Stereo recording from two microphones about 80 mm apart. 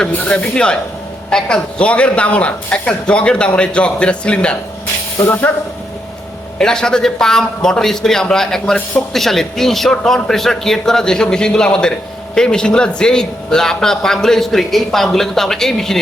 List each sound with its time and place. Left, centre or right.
0.0 s a man's voice: centre
5.2 s speech: left
6.6 s a man's voice: centre